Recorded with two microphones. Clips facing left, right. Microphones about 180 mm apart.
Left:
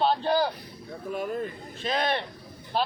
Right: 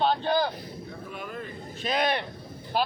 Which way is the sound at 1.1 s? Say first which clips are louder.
Left 9 dB; 40° left (ahead or behind).